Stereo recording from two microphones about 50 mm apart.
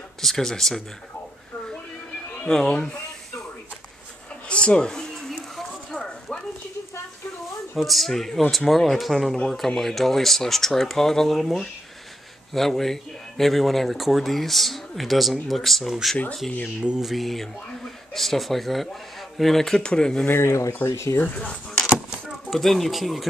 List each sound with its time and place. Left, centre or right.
0.2 s speech: centre
2.4 s speech: centre
4.5 s a sound: left
7.7 s speech: centre
17.0 s speech: centre
19.8 s speech: centre
20.4 s speech: left
21.2 s speech: left
22.5 s speech: centre